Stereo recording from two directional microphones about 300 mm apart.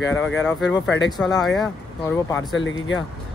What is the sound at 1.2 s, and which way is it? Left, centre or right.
A man's voice, centre.